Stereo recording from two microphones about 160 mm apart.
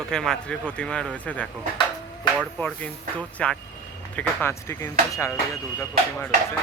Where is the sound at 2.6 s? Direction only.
10° left (ahead or behind).